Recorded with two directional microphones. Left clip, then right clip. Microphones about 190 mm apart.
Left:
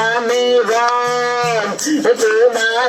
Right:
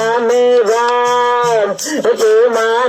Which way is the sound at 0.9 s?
30° left (ahead or behind).